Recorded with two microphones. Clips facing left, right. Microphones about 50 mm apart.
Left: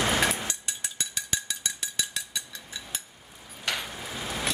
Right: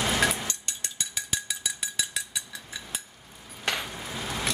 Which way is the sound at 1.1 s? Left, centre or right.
Centre.